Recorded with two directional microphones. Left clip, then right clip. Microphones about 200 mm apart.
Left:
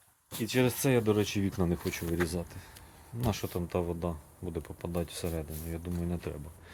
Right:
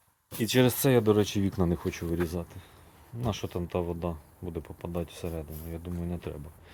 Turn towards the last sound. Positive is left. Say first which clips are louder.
# right 1 dB
turn(degrees=-5)  # may be behind; listen again after turning